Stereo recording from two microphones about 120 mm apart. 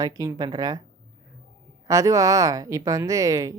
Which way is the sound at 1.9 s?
30° right (ahead or behind).